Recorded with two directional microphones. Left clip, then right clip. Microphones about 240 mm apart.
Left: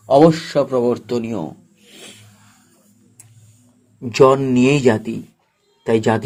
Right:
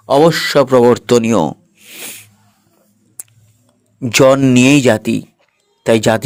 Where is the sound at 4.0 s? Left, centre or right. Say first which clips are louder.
Right 3 dB; right.